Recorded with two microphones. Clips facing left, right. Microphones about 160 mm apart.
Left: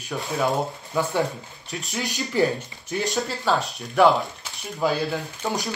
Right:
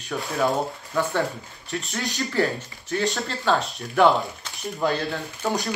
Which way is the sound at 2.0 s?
20° left (ahead or behind).